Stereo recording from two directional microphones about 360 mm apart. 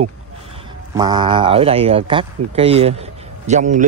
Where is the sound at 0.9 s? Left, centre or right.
Centre.